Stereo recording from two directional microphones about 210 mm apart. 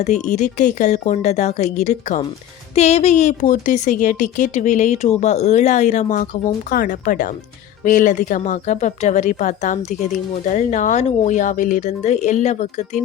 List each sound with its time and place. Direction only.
0.0 s a woman's voice: 35° left (ahead or behind)